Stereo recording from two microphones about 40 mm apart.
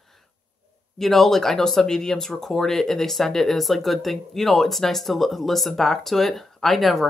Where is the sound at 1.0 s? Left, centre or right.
Centre.